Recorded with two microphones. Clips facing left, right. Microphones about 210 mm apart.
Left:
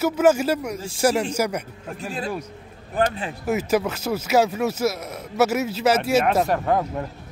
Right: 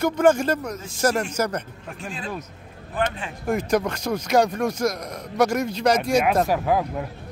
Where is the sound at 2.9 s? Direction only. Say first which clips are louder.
Left 3 dB; 35° left (ahead or behind).